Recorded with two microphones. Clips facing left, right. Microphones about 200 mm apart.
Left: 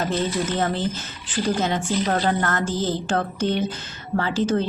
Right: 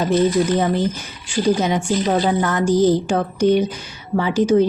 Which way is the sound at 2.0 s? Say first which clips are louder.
Right 4 dB; 10° right (ahead or behind).